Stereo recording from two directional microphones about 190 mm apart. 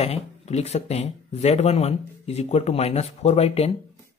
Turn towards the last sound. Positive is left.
turn(degrees=35)  # may be behind; listen again after turning